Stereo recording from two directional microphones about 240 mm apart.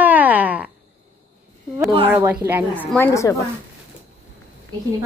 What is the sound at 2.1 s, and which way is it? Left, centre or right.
Speech, centre.